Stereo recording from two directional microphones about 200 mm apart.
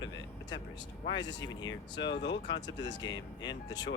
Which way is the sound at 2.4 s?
60° left (ahead or behind).